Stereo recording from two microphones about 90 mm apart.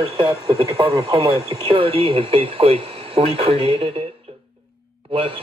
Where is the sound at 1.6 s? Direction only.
80° right.